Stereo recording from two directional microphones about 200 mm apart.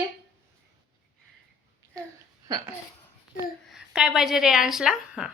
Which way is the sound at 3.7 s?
5° right (ahead or behind).